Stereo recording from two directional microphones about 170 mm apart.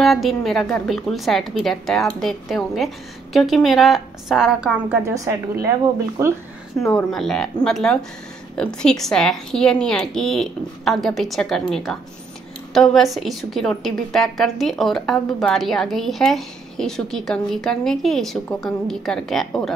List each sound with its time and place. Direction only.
0.0 s a woman's voice: centre (ahead or behind)
5.0 s a woman's voice: 15° right (ahead or behind)
7.0 s a woman's voice: centre (ahead or behind)